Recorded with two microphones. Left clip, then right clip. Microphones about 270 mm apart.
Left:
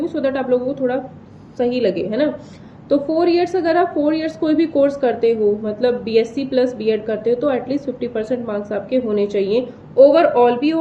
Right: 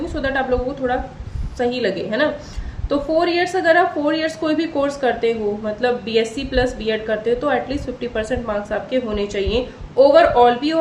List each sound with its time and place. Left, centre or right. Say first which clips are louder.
0.1 s a woman's voice: even; centre